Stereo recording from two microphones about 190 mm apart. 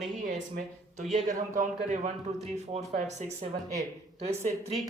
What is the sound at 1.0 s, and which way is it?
Speech, centre (ahead or behind).